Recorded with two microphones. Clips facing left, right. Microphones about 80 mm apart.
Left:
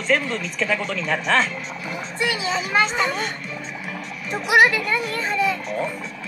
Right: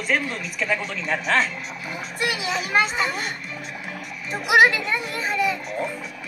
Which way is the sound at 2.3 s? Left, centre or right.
Centre.